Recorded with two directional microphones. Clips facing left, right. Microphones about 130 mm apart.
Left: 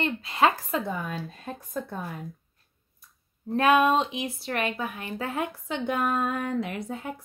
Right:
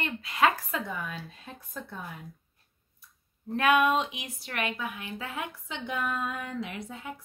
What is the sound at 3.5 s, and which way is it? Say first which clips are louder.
Speech: left 3 dB; 35° left (ahead or behind).